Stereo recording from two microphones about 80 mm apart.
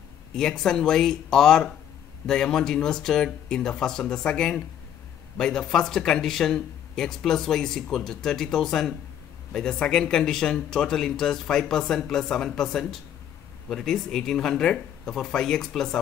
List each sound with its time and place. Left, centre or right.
0.3 s speech: centre